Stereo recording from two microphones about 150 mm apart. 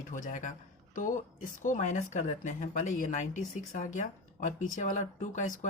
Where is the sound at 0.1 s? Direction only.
55° left (ahead or behind).